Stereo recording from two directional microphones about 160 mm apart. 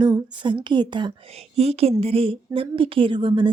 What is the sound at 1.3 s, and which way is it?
A woman's voice, 40° right (ahead or behind).